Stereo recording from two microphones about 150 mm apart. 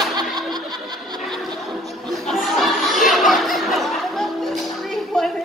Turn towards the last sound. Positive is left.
turn(degrees=0)  # may be behind; listen again after turning